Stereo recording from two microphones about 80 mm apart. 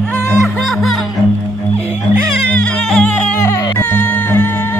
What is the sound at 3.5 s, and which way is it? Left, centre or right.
Music, left.